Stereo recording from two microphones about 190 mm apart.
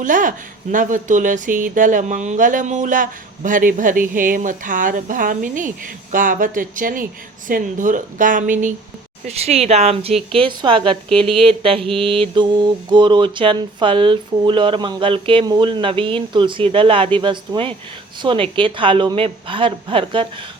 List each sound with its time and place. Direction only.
0.0 s speech: 45° right (ahead or behind)
9.2 s speech: 35° right (ahead or behind)
11.3 s mantra: 30° right (ahead or behind)